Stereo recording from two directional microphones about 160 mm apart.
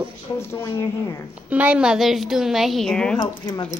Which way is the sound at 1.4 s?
10° right (ahead or behind).